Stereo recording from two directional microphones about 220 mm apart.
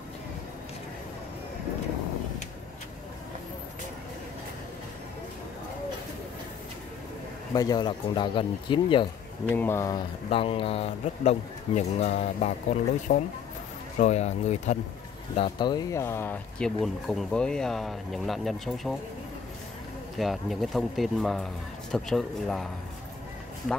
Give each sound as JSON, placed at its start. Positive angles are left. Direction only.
{"t": 7.5, "sound": "speech", "side_deg": 20}
{"t": 9.5, "sound": "speech", "side_deg": 10}
{"t": 20.2, "sound": "speech", "side_deg": 0}